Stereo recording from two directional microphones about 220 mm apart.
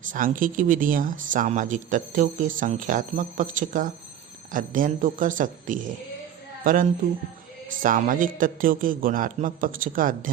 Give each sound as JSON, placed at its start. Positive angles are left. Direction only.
{"t": 0.1, "sound": "speech", "side_deg": -40}